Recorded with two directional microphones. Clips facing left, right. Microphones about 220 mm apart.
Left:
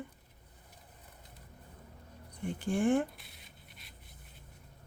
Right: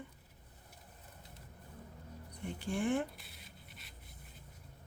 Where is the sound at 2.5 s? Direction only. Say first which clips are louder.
Left 5 dB; 50° left (ahead or behind).